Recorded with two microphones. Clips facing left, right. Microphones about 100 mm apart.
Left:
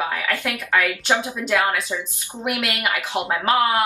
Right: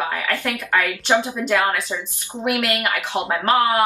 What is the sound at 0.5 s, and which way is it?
Speech, 20° right (ahead or behind).